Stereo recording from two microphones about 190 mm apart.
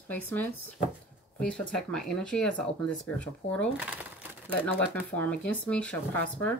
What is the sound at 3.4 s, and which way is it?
Speech, 35° left (ahead or behind).